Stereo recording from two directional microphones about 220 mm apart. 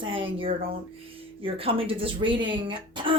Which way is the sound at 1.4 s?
25° right (ahead or behind).